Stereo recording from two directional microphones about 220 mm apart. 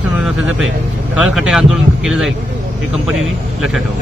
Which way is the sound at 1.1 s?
5° right (ahead or behind).